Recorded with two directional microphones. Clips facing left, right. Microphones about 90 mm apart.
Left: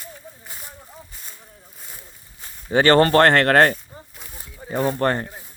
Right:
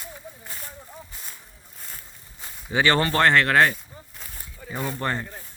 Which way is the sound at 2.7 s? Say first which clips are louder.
Left 7 dB; 50° left (ahead or behind).